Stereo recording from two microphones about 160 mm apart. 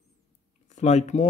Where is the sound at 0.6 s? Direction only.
45° left (ahead or behind).